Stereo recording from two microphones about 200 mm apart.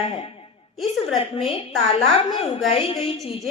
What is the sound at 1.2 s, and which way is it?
A woman's voice, 30° left (ahead or behind).